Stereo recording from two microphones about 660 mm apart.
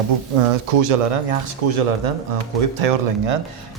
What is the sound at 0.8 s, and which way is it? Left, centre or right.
Speech, right.